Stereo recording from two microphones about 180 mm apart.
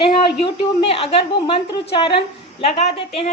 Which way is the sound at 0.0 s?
30° left (ahead or behind).